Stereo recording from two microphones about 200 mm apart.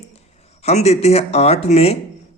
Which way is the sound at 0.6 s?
35° left (ahead or behind).